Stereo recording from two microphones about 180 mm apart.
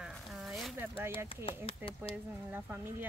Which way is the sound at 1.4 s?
30° left (ahead or behind).